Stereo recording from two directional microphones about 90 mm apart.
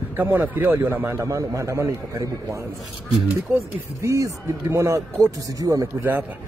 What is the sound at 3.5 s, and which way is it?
Speech, 35° right (ahead or behind).